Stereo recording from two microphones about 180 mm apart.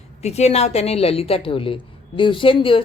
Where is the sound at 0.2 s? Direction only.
35° left (ahead or behind).